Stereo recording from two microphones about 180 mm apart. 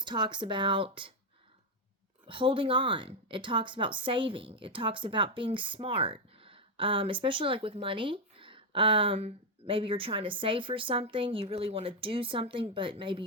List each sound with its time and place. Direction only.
0.0 s speech: 25° right (ahead or behind)
2.2 s speech: 30° right (ahead or behind)